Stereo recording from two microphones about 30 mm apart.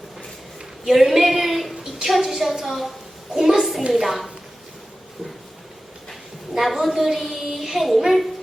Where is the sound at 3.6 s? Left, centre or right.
Centre.